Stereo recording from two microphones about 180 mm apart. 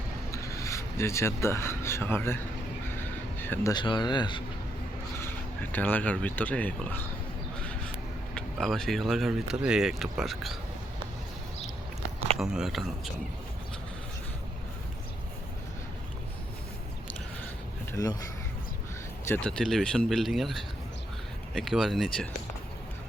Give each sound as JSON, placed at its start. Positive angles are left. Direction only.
{"t": 0.3, "sound": "speech", "side_deg": 15}
{"t": 5.7, "sound": "speech", "side_deg": 10}
{"t": 8.4, "sound": "speech", "side_deg": 0}
{"t": 12.4, "sound": "speech", "side_deg": -5}
{"t": 17.9, "sound": "speech", "side_deg": 20}
{"t": 19.3, "sound": "speech", "side_deg": 5}